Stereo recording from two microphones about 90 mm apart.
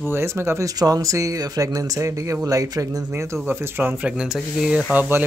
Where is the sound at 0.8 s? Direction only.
40° right (ahead or behind).